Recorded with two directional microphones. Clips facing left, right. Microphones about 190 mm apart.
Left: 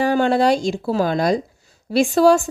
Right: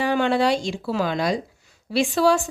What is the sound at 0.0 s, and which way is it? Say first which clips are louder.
Speech: left 4 dB; 40° left (ahead or behind).